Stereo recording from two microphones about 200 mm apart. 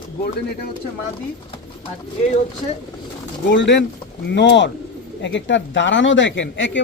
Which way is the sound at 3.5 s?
60° left (ahead or behind).